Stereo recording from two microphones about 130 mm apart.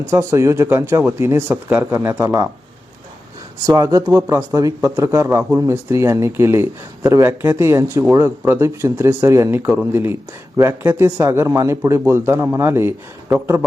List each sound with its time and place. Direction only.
0.0 s speech: 20° right (ahead or behind)
3.7 s speech: 25° right (ahead or behind)